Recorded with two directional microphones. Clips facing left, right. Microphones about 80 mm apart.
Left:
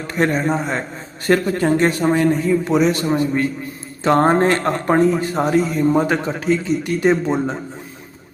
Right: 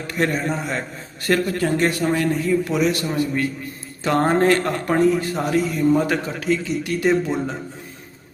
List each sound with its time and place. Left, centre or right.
0.1 s a man's voice: left